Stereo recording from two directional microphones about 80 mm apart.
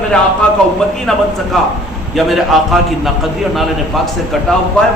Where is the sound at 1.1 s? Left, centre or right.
Centre.